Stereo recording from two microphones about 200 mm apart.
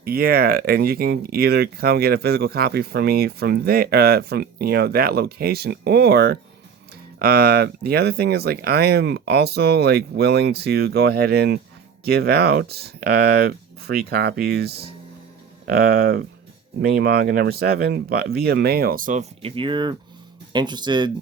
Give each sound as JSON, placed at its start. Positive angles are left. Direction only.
{"t": 0.0, "sound": "speech", "side_deg": -50}